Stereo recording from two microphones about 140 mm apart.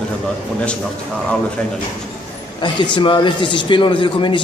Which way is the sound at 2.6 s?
35° left (ahead or behind).